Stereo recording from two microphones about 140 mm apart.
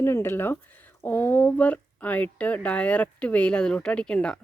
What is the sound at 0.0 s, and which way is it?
Speech, 15° left (ahead or behind).